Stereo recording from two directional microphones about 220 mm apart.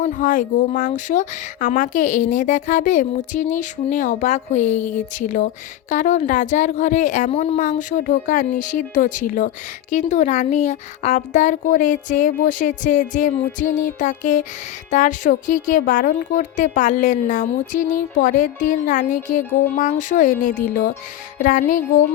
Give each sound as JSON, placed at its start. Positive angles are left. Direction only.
{"t": 0.0, "sound": "a woman's voice", "side_deg": 35}